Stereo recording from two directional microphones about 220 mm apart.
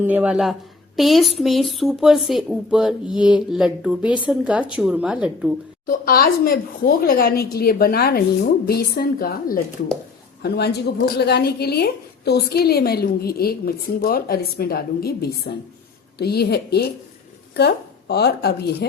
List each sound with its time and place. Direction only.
0.0 s speech: 10° right (ahead or behind)
5.8 s a woman's voice: 40° left (ahead or behind)